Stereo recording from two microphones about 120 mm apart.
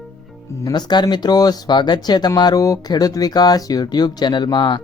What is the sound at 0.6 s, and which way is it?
Speech, 35° left (ahead or behind).